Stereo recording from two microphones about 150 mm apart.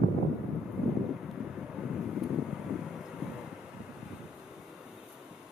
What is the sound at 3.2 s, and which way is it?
Vehicle, 5° right (ahead or behind).